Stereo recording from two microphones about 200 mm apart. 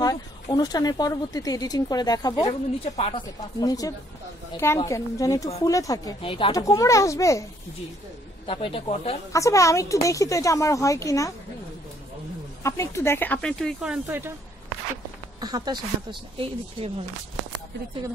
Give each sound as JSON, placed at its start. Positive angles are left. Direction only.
{"t": 0.0, "sound": "a woman's voice", "side_deg": 20}
{"t": 8.5, "sound": "speech", "side_deg": 25}
{"t": 9.3, "sound": "a woman's voice", "side_deg": 15}
{"t": 12.6, "sound": "a woman's voice", "side_deg": 15}
{"t": 14.0, "sound": "a woman's voice", "side_deg": -10}
{"t": 15.4, "sound": "a woman's voice", "side_deg": -20}